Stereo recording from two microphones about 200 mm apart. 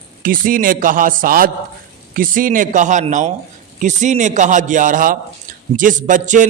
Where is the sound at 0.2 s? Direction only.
45° right (ahead or behind).